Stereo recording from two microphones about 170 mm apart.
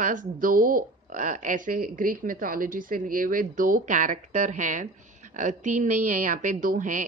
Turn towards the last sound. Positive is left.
turn(degrees=-50)  # may be behind; listen again after turning